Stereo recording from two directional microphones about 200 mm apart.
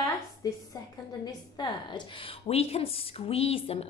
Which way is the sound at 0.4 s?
20° left (ahead or behind).